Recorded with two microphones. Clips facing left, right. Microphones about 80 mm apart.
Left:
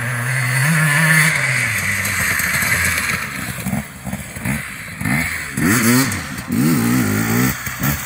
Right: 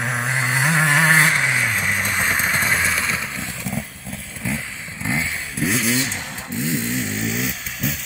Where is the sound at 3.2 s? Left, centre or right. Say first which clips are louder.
Left 3 dB; centre.